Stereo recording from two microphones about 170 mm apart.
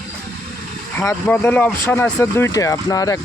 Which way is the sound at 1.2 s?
10° left (ahead or behind).